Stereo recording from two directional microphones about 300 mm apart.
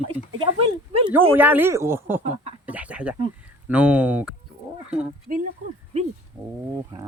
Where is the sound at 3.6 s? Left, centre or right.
Centre.